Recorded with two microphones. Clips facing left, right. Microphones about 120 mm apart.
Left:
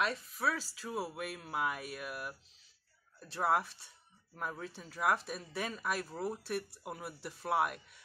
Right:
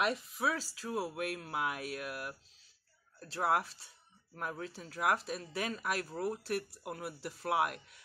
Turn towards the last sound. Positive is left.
turn(degrees=-5)  # may be behind; listen again after turning